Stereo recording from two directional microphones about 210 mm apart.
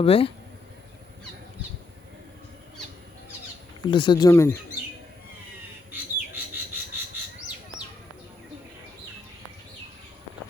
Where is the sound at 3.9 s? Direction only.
20° left (ahead or behind).